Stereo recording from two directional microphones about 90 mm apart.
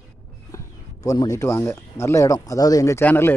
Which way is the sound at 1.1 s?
40° left (ahead or behind).